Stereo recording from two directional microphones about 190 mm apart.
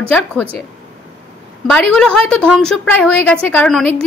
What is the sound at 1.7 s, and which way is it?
A woman's voice, 5° left (ahead or behind).